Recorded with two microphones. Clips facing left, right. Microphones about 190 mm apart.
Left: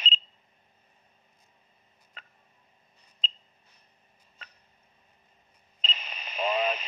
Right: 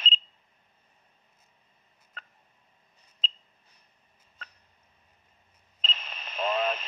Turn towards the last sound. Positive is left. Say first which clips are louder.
# even
turn(degrees=5)  # may be behind; listen again after turning